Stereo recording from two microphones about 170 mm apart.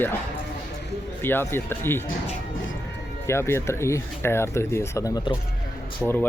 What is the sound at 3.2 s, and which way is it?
Speech, 15° left (ahead or behind).